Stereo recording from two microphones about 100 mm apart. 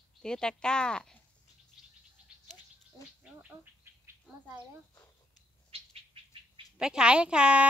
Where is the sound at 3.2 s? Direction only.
15° right (ahead or behind).